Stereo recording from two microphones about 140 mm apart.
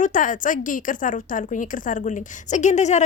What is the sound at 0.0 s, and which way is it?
A woman's voice, 70° left (ahead or behind).